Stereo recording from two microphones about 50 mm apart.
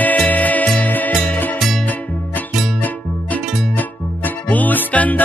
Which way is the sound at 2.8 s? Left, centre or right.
Left.